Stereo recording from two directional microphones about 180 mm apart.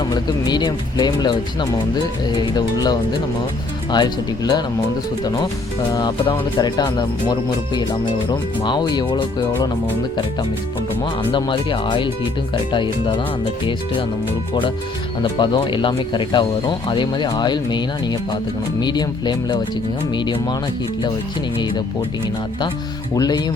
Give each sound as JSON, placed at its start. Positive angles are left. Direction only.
{"t": 0.0, "sound": "speech", "side_deg": 25}
{"t": 11.3, "sound": "speech", "side_deg": 25}
{"t": 15.2, "sound": "speech", "side_deg": 25}
{"t": 23.1, "sound": "speech", "side_deg": 20}